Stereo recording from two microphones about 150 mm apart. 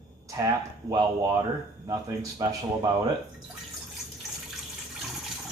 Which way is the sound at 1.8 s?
25° right (ahead or behind).